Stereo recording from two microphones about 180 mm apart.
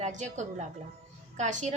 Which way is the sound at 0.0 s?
40° right (ahead or behind).